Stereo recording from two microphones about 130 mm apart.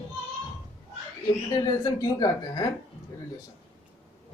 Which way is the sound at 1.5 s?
30° left (ahead or behind).